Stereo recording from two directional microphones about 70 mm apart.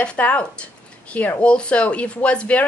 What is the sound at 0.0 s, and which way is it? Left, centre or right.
A woman's voice, centre.